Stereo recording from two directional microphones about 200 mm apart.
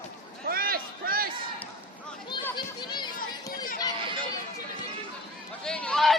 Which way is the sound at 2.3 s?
20° left (ahead or behind).